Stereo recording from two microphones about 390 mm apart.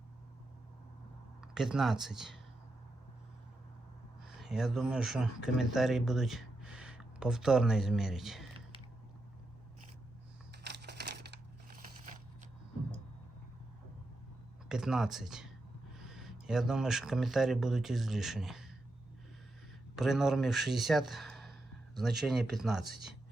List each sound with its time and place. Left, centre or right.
1.4 s speech: centre
4.4 s speech: centre
10.7 s a sound: right
14.7 s speech: centre
20.0 s speech: centre